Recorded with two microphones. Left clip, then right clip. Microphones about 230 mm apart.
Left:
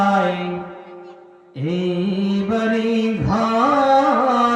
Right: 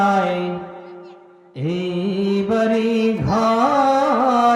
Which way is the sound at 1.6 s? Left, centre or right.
Right.